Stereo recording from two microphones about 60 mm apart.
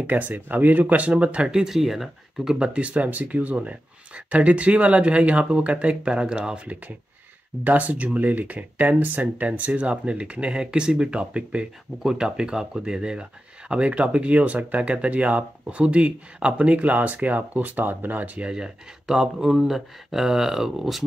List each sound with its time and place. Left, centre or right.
0.0 s speech: right; by 2.5 s centre
2.6 s speech: centre
18.5 s speech: centre